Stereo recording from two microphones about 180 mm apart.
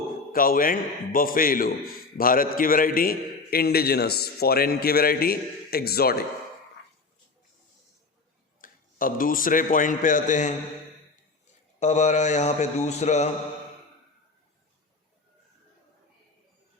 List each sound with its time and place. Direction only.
0.3 s a man's voice: 50° left (ahead or behind)
8.6 s a man's voice: 50° left (ahead or behind)
11.8 s a man's voice: 40° left (ahead or behind)